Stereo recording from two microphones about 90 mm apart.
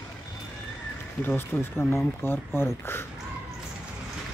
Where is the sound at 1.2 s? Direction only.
25° left (ahead or behind).